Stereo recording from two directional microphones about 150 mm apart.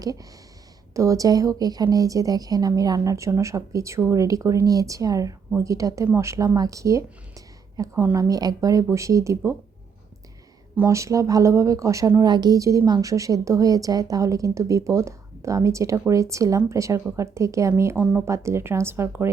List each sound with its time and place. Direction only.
0.0 s speech: 25° right (ahead or behind)
10.8 s speech: 20° right (ahead or behind)